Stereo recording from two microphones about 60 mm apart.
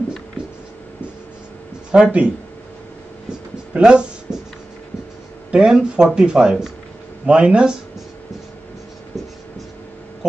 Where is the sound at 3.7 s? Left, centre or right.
Centre.